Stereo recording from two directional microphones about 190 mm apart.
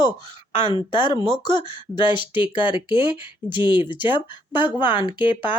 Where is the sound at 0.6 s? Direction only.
25° left (ahead or behind).